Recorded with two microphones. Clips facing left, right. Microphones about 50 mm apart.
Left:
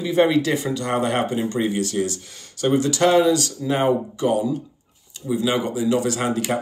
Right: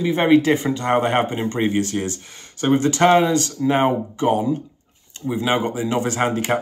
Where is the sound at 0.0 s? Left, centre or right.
Right.